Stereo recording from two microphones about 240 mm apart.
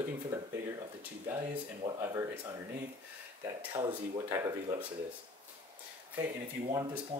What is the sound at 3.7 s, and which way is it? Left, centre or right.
Speech, centre.